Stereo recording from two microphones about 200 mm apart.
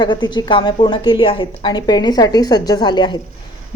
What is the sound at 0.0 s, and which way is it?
A woman's voice, 20° left (ahead or behind).